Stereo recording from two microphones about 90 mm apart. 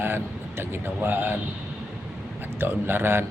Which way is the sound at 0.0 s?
25° right (ahead or behind).